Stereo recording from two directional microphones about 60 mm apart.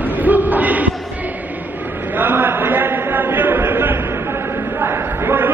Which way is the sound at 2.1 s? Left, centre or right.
Right.